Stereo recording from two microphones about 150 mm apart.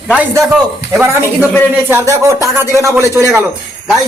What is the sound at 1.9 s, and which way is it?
Speech, 15° right (ahead or behind).